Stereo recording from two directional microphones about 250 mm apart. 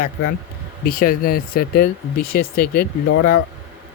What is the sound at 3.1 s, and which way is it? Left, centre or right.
Speech, left.